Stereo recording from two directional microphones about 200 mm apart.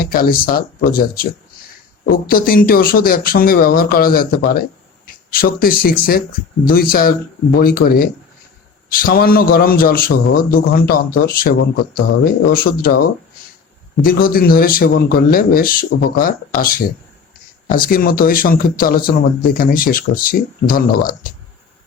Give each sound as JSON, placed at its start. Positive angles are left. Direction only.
{"t": 0.0, "sound": "speech", "side_deg": 45}